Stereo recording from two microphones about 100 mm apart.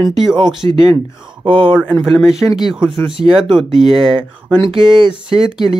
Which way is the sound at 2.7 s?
Centre (ahead or behind).